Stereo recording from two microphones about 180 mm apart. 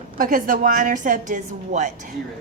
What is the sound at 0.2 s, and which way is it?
A woman's voice, 55° right (ahead or behind).